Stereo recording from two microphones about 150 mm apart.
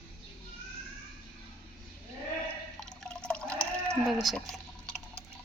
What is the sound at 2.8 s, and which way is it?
Water, 5° left (ahead or behind).